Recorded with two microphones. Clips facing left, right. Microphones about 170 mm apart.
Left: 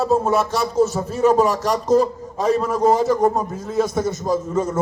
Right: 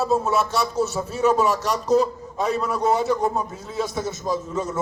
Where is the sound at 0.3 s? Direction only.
50° left (ahead or behind).